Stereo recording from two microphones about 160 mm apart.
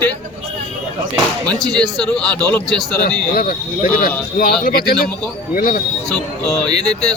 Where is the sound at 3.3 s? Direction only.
65° left (ahead or behind).